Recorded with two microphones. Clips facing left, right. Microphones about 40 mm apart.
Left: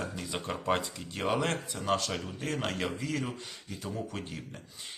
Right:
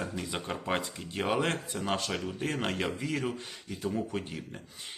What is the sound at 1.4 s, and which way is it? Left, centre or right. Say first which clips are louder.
Speech: right 1 dB; right.